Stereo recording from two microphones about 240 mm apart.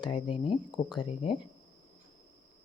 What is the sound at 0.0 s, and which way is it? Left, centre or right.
Speech, centre.